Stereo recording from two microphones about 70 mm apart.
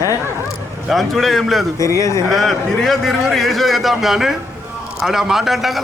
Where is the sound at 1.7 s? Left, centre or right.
Left.